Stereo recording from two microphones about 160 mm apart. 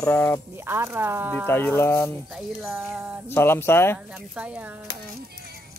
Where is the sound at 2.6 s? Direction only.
15° right (ahead or behind).